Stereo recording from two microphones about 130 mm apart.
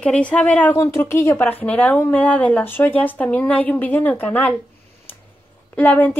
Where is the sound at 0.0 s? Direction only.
10° left (ahead or behind).